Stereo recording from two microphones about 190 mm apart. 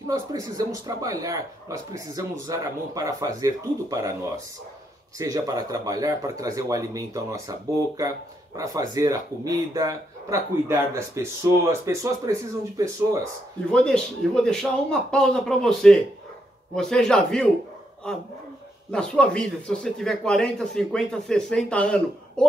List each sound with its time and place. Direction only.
0.1 s speech: 20° right (ahead or behind)
5.2 s speech: 20° right (ahead or behind)
8.5 s speech: 20° right (ahead or behind)
13.7 s a man's voice: 5° left (ahead or behind)